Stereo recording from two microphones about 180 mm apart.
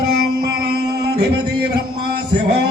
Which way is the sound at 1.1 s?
65° right (ahead or behind).